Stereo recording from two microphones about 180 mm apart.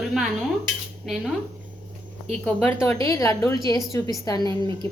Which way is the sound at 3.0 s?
20° left (ahead or behind).